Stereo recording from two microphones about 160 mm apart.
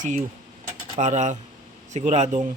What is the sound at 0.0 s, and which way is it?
A man's voice, 50° right (ahead or behind).